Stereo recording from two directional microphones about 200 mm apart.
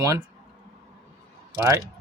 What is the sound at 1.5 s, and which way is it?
Speech, 15° right (ahead or behind).